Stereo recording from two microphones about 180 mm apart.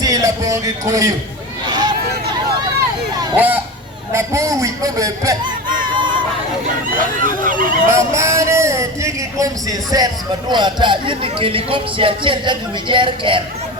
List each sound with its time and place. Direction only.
0.0 s speech: 20° right (ahead or behind)
1.6 s a sound: 25° right (ahead or behind)
3.3 s a man's voice: 10° right (ahead or behind)
5.9 s chatter: 25° right (ahead or behind)
6.8 s speech: 50° right (ahead or behind)
8.1 s a sound: 15° right (ahead or behind)
10.5 s speech: 25° right (ahead or behind)